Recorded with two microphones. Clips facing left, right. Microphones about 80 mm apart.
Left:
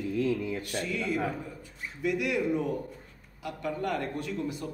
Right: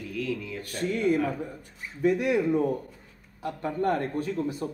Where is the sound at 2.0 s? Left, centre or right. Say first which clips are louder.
Right 5 dB; right.